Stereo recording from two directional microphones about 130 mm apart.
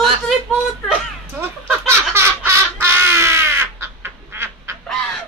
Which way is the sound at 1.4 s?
15° right (ahead or behind).